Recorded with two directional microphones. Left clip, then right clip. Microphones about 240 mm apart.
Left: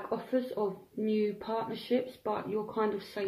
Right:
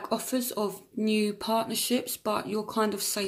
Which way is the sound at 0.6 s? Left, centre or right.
Right.